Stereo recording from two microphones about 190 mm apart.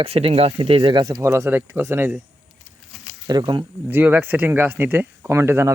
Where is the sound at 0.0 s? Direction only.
30° right (ahead or behind); by 2.1 s 10° right (ahead or behind).